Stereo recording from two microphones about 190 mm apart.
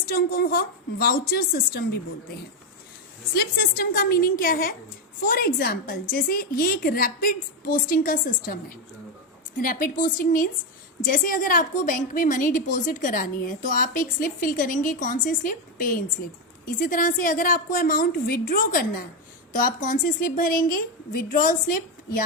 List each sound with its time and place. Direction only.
0.1 s a woman's voice: 50° left (ahead or behind)
3.3 s a woman's voice: 55° left (ahead or behind)
9.6 s a woman's voice: 45° left (ahead or behind)